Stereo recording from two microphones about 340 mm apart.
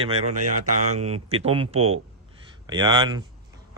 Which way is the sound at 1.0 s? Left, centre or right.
Centre.